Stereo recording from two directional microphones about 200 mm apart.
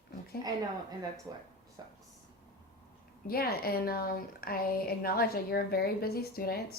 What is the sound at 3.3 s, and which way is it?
Speech, 50° left (ahead or behind).